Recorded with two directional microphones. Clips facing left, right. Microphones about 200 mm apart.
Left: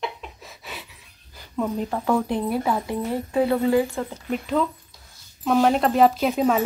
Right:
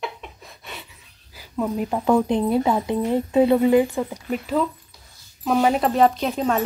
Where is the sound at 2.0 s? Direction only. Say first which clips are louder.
Right 5 dB; 20° right (ahead or behind).